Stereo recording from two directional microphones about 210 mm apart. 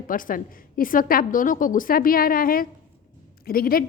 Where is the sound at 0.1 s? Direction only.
40° left (ahead or behind).